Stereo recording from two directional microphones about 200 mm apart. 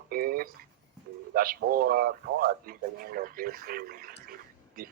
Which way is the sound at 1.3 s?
45° right (ahead or behind).